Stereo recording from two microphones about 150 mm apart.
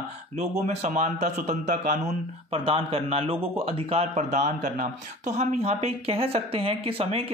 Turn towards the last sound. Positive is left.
turn(degrees=-40)  # may be behind; listen again after turning